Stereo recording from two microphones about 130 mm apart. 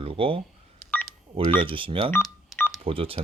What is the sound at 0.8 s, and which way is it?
Telephone dialing, 10° left (ahead or behind).